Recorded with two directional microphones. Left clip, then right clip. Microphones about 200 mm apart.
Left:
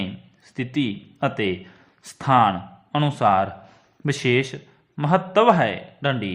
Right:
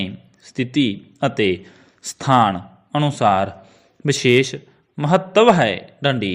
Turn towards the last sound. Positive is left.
turn(degrees=-15)  # may be behind; listen again after turning